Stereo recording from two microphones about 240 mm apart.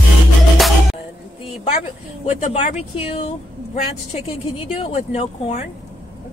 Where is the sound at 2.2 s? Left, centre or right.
Left.